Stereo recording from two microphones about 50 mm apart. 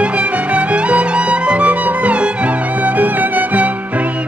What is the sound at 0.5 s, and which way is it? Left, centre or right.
Music, right.